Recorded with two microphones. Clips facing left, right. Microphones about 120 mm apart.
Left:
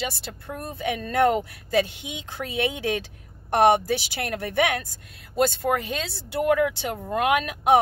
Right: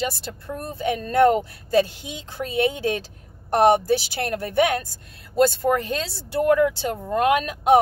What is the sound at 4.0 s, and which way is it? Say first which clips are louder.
Speech: right 3 dB; 30° right (ahead or behind).